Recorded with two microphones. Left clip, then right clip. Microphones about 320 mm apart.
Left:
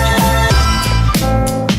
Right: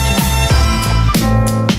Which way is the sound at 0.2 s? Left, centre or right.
Centre.